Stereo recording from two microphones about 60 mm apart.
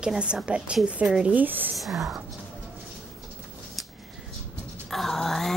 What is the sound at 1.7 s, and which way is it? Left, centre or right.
Speech, centre.